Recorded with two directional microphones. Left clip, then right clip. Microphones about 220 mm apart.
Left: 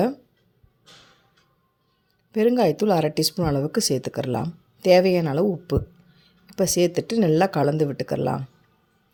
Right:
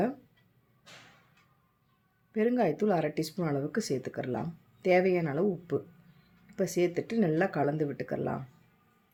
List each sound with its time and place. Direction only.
2.3 s speech: 35° left (ahead or behind)